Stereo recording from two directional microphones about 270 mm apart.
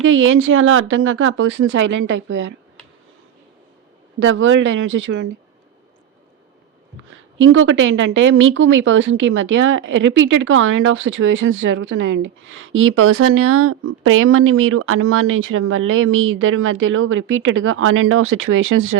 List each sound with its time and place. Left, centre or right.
0.0 s a woman's voice: right
4.2 s a woman's voice: right
7.1 s a woman's voice: right